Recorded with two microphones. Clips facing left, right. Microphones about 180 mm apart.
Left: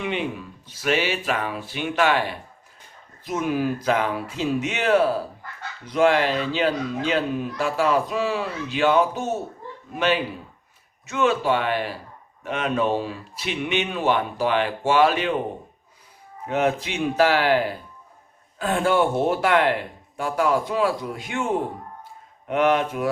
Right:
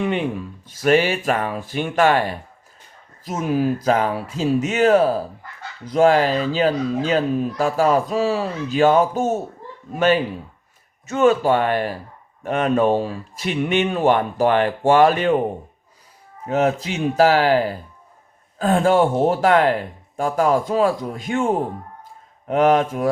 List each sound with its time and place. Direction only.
0.0 s a man's voice: 45° right (ahead or behind)
11.1 s a man's voice: 45° right (ahead or behind)
16.5 s a man's voice: 40° right (ahead or behind)
22.4 s a man's voice: 40° right (ahead or behind)